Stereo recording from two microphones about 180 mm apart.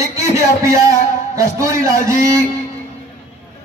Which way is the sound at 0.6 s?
15° right (ahead or behind).